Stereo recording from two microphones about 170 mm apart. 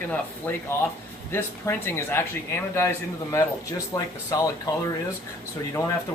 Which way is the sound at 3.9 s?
20° left (ahead or behind).